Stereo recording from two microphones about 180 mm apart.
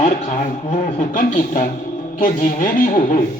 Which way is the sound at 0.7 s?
45° left (ahead or behind).